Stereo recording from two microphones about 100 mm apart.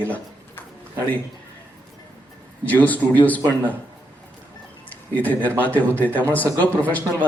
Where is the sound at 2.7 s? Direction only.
15° left (ahead or behind).